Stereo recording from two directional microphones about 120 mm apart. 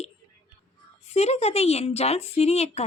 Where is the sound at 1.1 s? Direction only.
65° left (ahead or behind).